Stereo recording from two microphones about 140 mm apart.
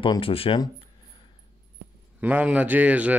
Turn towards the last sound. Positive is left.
turn(degrees=-10)  # may be behind; listen again after turning